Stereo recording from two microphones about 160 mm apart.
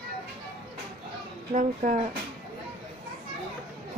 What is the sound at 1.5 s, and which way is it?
Speech, 50° right (ahead or behind).